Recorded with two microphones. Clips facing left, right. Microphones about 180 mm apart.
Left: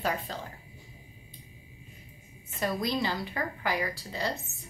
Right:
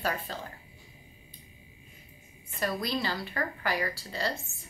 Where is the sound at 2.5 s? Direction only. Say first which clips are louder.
Left 1 dB; 20° left (ahead or behind).